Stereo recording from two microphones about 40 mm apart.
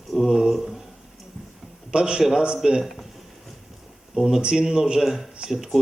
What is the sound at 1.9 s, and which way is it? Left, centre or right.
Speech, centre.